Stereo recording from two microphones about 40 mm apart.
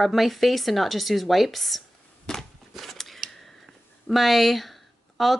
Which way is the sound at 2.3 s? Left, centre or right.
Centre.